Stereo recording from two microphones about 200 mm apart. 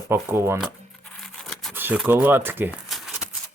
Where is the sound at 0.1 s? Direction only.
10° right (ahead or behind).